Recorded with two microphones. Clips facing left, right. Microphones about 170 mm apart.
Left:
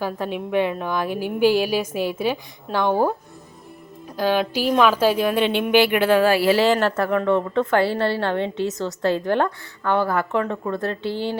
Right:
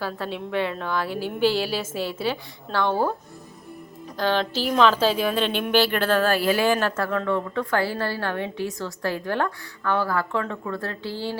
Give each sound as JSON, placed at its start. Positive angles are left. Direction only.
{"t": 0.0, "sound": "a woman's voice", "side_deg": 15}
{"t": 4.2, "sound": "a woman's voice", "side_deg": 10}
{"t": 6.4, "sound": "speech", "side_deg": 80}
{"t": 6.7, "sound": "a woman's voice", "side_deg": 20}